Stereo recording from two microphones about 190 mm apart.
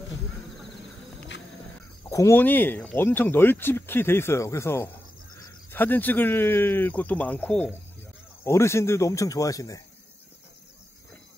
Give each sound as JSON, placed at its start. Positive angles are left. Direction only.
{"t": 2.0, "sound": "speech", "side_deg": 15}